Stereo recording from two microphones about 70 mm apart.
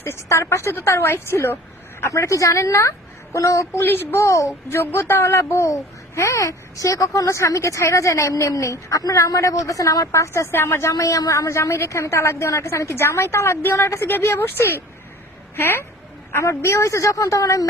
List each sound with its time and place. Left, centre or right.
0.0 s a woman's voice: left
3.8 s a woman's voice: left
4.2 s speech: left
4.8 s speech: left
10.1 s a woman's voice: left
10.9 s a woman's voice: left